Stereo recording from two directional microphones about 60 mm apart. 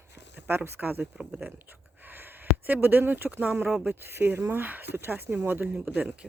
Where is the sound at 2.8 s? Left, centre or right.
Right.